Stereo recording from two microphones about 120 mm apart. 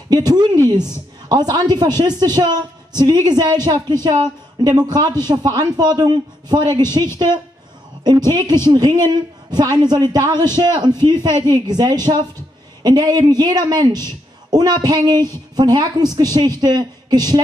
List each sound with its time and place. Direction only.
0.1 s a woman's voice: 35° right (ahead or behind)